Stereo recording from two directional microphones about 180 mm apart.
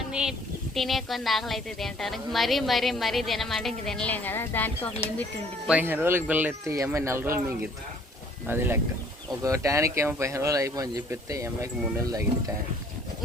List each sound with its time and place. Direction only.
0.1 s speech: 5° right (ahead or behind)
5.6 s speech: 10° right (ahead or behind)
8.4 s speech: 10° right (ahead or behind)